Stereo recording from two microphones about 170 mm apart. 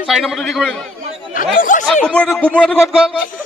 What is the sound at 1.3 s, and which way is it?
Speech, 50° left (ahead or behind).